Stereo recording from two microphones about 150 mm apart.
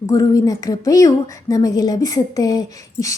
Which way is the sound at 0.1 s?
20° left (ahead or behind).